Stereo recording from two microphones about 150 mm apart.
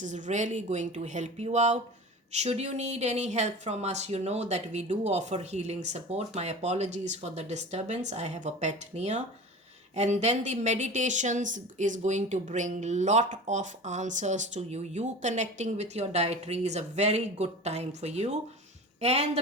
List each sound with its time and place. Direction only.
0.0 s a woman's voice: 55° right (ahead or behind)